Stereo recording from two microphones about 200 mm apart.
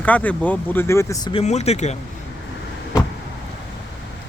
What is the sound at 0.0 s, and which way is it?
Speech, 5° left (ahead or behind).